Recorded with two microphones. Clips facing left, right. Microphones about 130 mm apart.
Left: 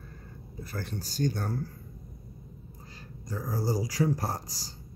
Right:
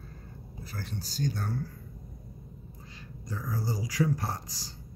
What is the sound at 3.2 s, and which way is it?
Speech, 40° left (ahead or behind).